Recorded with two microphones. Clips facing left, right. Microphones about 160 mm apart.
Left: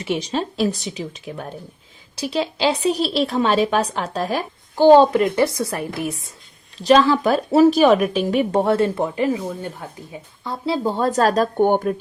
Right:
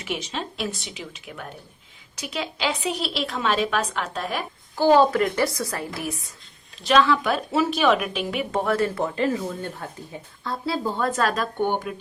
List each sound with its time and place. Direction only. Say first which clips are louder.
0.0 s a woman's voice: left 7 dB; 35° left (ahead or behind)
6.8 s a woman's voice: left 5 dB; 35° left (ahead or behind); by 10.8 s 15° left (ahead or behind)
10.8 s a woman's voice: left 6 dB; 30° left (ahead or behind)